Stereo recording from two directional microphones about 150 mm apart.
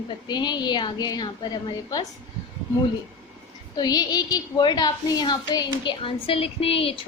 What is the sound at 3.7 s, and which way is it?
A woman's voice, 25° left (ahead or behind).